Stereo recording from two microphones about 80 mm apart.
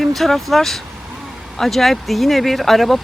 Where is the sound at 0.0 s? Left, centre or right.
Centre.